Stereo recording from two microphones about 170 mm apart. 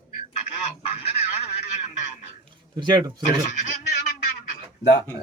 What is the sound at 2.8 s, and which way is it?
Speech, 25° right (ahead or behind).